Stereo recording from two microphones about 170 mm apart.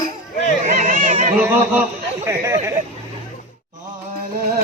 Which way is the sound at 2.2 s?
15° right (ahead or behind).